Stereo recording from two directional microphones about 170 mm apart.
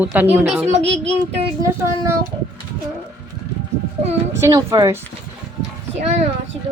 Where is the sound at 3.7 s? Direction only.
15° right (ahead or behind).